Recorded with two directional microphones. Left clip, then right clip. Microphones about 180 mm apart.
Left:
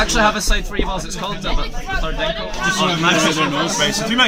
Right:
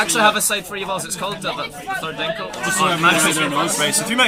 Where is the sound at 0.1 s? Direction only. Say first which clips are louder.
Even; 15° right (ahead or behind).